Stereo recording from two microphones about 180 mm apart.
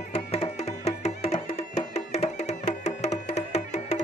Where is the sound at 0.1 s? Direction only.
35° left (ahead or behind).